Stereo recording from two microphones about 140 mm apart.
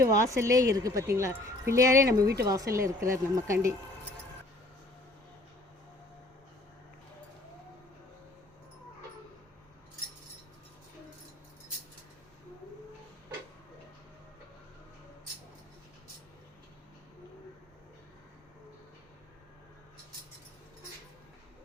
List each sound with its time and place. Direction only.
0.0 s speech: 20° right (ahead or behind)